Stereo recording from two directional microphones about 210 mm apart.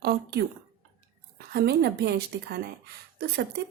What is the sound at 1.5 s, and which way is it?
A woman's voice, 50° right (ahead or behind).